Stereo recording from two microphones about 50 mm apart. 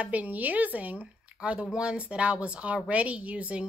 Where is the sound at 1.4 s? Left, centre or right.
Centre.